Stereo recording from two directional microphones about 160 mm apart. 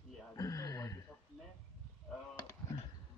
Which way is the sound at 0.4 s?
20° left (ahead or behind).